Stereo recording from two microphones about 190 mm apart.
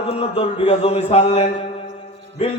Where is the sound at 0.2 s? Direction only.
35° left (ahead or behind).